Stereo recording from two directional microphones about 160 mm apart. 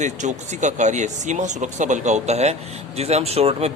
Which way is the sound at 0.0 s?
50° right (ahead or behind).